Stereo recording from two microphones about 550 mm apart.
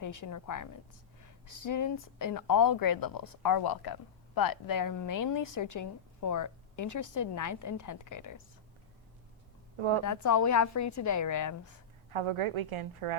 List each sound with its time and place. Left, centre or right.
0.0 s a woman's voice: left
9.7 s a woman's voice: right
10.0 s a woman's voice: left
12.1 s a woman's voice: right